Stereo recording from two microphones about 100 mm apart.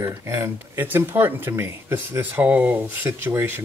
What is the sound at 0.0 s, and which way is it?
Speech, 25° right (ahead or behind).